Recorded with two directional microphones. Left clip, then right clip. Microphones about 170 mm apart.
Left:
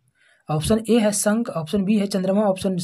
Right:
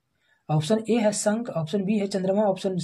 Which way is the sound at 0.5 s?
30° left (ahead or behind).